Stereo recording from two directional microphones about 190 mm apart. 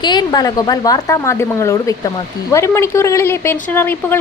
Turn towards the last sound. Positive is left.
turn(degrees=10)  # may be behind; listen again after turning